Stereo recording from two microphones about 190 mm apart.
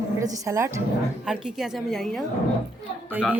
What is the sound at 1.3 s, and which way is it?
Speech, centre (ahead or behind).